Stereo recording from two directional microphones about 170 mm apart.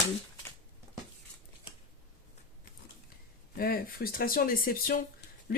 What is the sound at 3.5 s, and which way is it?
Speech, 60° left (ahead or behind).